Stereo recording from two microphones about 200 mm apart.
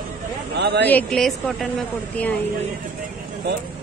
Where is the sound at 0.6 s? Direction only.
55° right (ahead or behind).